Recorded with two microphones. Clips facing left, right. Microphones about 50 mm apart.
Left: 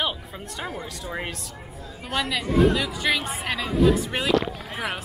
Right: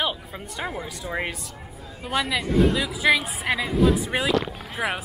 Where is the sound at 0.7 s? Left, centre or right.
Centre.